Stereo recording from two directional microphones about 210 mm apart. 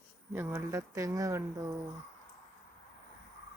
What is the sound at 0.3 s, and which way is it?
Speech, 10° right (ahead or behind).